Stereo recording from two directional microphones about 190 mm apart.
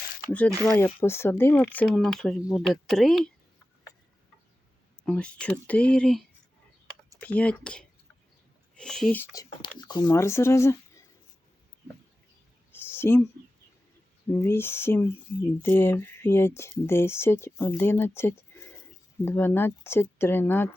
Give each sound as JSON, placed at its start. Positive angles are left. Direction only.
{"t": 0.3, "sound": "speech", "side_deg": 5}
{"t": 5.0, "sound": "speech", "side_deg": 5}
{"t": 9.3, "sound": "speech", "side_deg": 20}
{"t": 12.7, "sound": "a sound", "side_deg": 10}
{"t": 14.4, "sound": "speech", "side_deg": 10}